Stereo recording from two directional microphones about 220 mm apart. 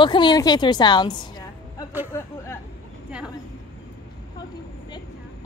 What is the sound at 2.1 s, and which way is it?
Hubbub, 10° left (ahead or behind).